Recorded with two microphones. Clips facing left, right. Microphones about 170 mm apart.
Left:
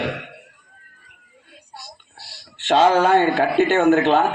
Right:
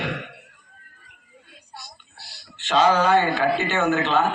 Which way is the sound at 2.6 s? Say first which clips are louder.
Left 3 dB; 65° left (ahead or behind).